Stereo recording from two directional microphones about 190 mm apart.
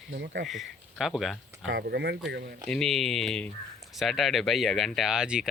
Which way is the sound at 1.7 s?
55° right (ahead or behind).